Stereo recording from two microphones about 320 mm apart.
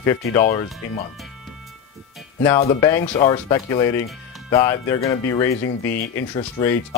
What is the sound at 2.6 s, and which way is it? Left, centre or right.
Speech, centre.